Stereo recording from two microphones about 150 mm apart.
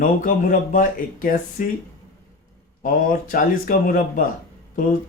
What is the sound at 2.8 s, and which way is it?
Speech, 70° left (ahead or behind).